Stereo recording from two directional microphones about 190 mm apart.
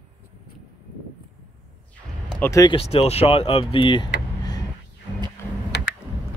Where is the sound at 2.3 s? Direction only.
10° left (ahead or behind).